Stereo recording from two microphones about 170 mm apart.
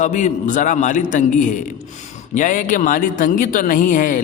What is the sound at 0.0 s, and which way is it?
Speech, 45° left (ahead or behind).